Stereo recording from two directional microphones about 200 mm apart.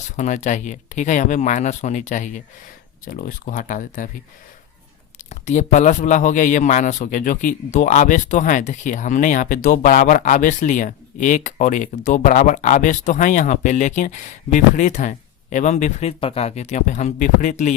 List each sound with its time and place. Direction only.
0.2 s a man's voice: 35° left (ahead or behind)
5.3 s a man's voice: 35° left (ahead or behind)